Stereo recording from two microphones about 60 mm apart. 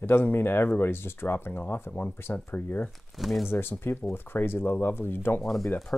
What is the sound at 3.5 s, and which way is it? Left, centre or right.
Speech, left.